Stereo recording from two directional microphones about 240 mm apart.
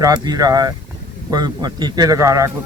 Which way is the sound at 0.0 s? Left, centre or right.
Centre.